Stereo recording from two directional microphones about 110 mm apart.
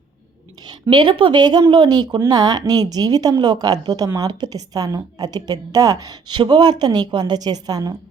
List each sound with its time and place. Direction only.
0.6 s a woman's voice: 40° right (ahead or behind)